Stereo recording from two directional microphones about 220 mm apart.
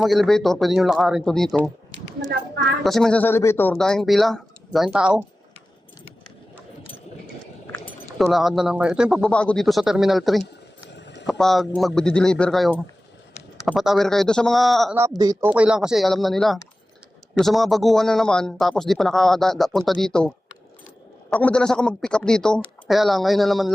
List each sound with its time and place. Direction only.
0.0 s a man's voice: centre (ahead or behind)
2.8 s a man's voice: centre (ahead or behind)
8.2 s a man's voice: centre (ahead or behind)
10.4 s a sound: 50° left (ahead or behind)
11.3 s a man's voice: centre (ahead or behind)
14.9 s a man's voice: 15° right (ahead or behind)